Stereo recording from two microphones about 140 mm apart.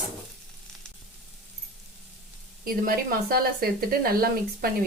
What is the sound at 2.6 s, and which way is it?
Speech, 90° right.